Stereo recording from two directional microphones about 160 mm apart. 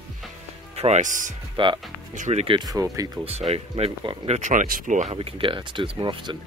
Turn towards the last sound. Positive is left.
turn(degrees=-30)  # may be behind; listen again after turning